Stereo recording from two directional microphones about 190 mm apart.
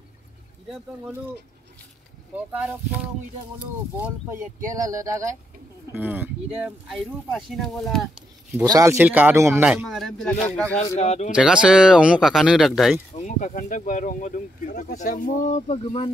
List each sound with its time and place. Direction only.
2.5 s speech: 10° right (ahead or behind)
4.0 s speech: 5° right (ahead or behind)
4.7 s speech: 15° right (ahead or behind); by 8.1 s centre (ahead or behind)
8.6 s speech: 15° right (ahead or behind); by 10.8 s 5° left (ahead or behind)
11.0 s speech: 35° left (ahead or behind)
11.3 s speech: 5° right (ahead or behind)
13.1 s speech: 40° left (ahead or behind)